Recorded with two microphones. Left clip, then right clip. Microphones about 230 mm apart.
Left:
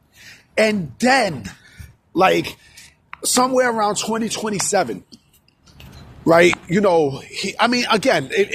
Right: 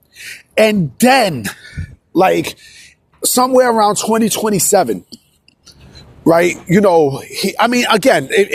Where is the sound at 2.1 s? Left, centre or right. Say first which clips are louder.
Right 4 dB; right.